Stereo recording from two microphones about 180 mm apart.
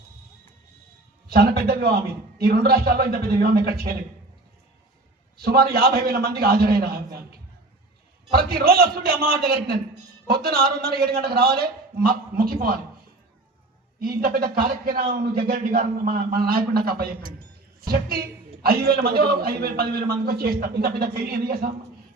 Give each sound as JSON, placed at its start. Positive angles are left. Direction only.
{"t": 1.3, "sound": "a man's voice", "side_deg": -60}
{"t": 5.4, "sound": "a man's voice", "side_deg": -60}
{"t": 8.3, "sound": "a man's voice", "side_deg": -60}
{"t": 14.0, "sound": "a man's voice", "side_deg": -55}